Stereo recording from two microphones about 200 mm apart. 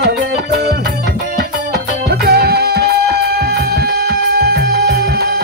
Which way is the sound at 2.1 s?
50° right (ahead or behind).